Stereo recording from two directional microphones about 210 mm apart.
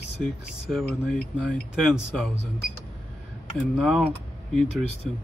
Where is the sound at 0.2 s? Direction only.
Centre (ahead or behind).